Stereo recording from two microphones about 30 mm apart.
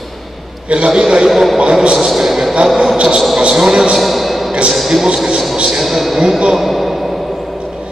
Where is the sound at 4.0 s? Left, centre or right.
Centre.